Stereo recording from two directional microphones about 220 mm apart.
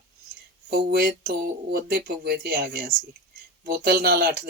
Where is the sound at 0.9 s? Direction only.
40° right (ahead or behind).